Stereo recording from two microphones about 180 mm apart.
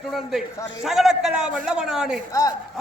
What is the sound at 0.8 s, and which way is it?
A man's voice, centre (ahead or behind).